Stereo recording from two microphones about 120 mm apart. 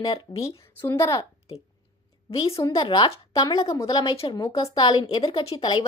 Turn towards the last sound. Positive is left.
turn(degrees=45)  # may be behind; listen again after turning